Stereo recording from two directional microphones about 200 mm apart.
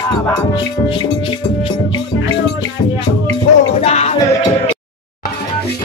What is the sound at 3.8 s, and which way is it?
Music, 30° left (ahead or behind).